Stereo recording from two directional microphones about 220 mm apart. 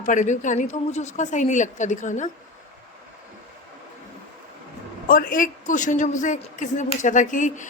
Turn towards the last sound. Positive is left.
turn(degrees=35)  # may be behind; listen again after turning